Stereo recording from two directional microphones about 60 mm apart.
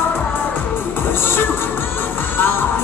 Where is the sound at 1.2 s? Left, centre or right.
Left.